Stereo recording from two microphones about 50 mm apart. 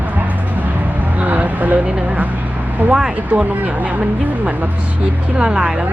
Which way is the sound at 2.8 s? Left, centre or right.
Right.